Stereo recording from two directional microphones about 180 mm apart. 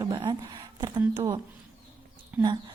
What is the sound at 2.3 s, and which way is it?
Speech, 10° right (ahead or behind).